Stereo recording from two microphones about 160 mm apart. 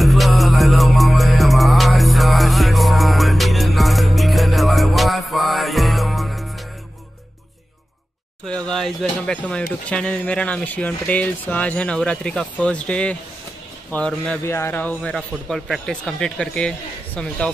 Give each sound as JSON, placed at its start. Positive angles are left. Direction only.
{"t": 0.0, "sound": "music", "side_deg": 0}
{"t": 8.6, "sound": "speech", "side_deg": 5}
{"t": 14.4, "sound": "speech", "side_deg": 15}